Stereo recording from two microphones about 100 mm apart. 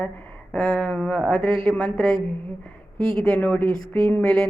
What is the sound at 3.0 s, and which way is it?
Speech, 55° right (ahead or behind).